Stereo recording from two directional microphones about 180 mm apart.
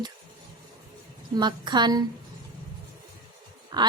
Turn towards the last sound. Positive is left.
turn(degrees=-25)  # may be behind; listen again after turning